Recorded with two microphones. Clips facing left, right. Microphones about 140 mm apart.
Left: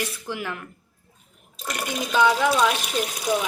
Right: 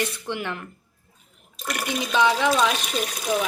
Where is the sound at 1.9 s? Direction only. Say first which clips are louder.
Left 1 dB; centre (ahead or behind).